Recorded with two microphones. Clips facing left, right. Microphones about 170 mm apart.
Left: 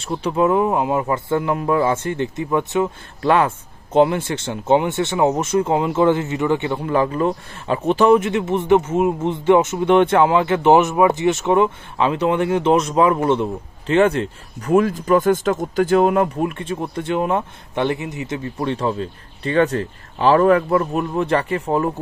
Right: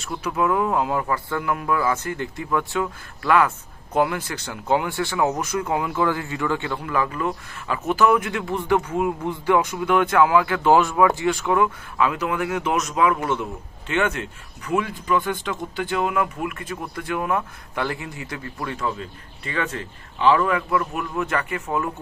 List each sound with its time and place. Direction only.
0.0 s speech: 30° left (ahead or behind)